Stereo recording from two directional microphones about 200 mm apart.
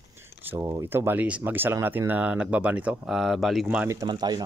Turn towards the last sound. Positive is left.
turn(degrees=-20)  # may be behind; listen again after turning